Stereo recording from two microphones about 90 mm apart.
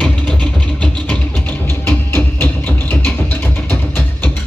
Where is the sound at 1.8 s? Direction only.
20° left (ahead or behind).